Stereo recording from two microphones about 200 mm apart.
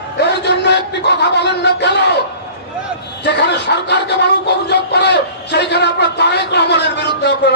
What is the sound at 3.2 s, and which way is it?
Speech, 60° left (ahead or behind).